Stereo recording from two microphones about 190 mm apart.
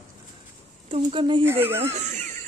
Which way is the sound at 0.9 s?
25° right (ahead or behind).